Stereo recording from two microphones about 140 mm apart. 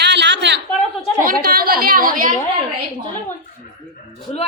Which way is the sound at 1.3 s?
90° right.